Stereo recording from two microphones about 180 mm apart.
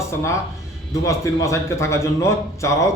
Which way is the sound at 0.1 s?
15° left (ahead or behind).